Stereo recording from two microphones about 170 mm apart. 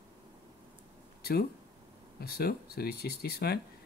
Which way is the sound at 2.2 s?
65° left (ahead or behind).